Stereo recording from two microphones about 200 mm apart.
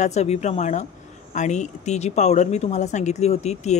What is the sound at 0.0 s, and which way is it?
Speech, 35° left (ahead or behind).